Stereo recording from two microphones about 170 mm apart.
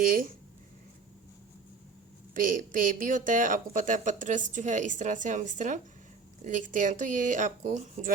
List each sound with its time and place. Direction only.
0.0 s speech: 55° right (ahead or behind)
2.3 s speech: 50° right (ahead or behind)